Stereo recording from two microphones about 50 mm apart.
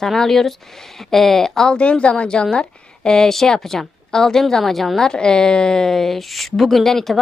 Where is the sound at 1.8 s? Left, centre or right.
Left.